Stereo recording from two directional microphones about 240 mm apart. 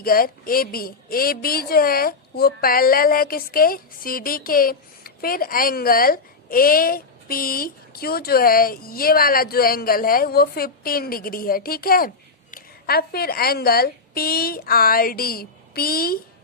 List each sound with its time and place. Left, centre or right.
0.0 s a woman's voice: left